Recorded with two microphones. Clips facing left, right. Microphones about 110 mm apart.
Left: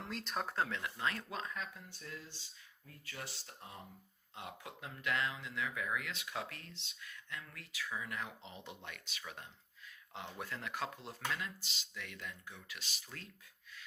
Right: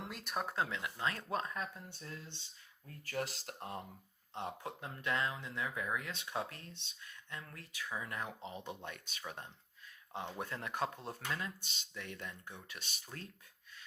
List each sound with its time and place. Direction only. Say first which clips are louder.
0.0 s speech: even; 10° right (ahead or behind)
0.8 s speech: even; 20° right (ahead or behind)
1.3 s speech: right 4 dB; 40° right (ahead or behind)
2.8 s speech: right 9 dB; 45° right (ahead or behind)
4.4 s speech: right 6 dB; 35° right (ahead or behind)